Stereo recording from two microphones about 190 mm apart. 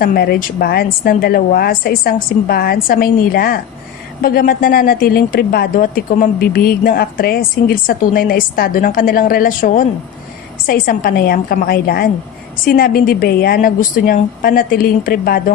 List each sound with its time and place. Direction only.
0.0 s a woman's voice: 55° left (ahead or behind)